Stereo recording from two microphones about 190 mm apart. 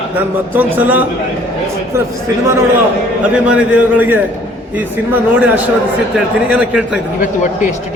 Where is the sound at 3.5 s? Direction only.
10° right (ahead or behind).